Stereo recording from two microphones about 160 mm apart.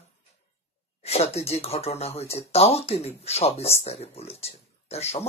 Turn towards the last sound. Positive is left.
turn(degrees=40)  # may be behind; listen again after turning